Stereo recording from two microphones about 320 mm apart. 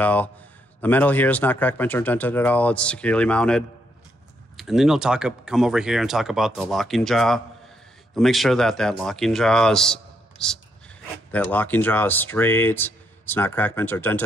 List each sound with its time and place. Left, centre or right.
0.0 s speech: centre